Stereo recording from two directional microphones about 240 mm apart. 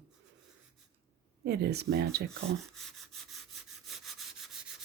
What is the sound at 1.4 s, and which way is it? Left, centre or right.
Speech, right.